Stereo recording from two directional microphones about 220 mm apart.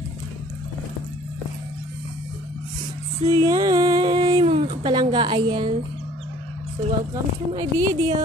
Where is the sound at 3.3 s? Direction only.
15° right (ahead or behind).